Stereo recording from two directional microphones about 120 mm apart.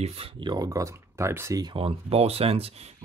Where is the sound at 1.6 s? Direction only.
45° right (ahead or behind).